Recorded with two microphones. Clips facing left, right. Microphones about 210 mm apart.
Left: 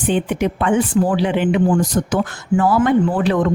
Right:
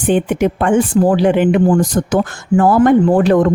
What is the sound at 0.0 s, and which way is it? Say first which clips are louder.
Speech: right 4 dB; 50° right (ahead or behind).